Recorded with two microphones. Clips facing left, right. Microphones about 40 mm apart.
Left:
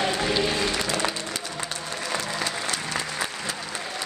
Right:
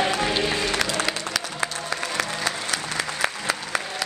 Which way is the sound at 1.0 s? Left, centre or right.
Right.